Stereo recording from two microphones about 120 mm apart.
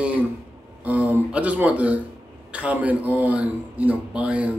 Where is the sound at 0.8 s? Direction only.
15° right (ahead or behind).